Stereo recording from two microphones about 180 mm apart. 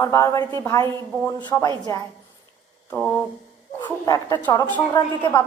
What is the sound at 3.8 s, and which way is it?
Speech, 20° left (ahead or behind).